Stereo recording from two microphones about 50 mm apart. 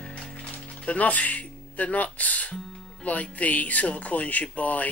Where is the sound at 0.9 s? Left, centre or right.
Left.